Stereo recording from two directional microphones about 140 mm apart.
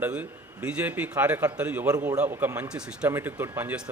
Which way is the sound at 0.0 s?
10° right (ahead or behind).